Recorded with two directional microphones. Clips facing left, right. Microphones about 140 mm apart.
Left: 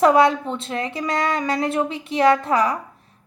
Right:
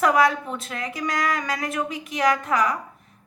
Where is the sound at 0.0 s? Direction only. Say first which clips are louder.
Left 4 dB; 30° left (ahead or behind).